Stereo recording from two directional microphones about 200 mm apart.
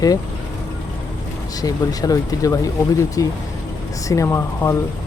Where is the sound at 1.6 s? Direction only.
20° left (ahead or behind).